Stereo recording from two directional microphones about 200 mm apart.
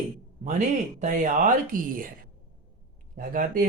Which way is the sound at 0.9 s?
40° right (ahead or behind).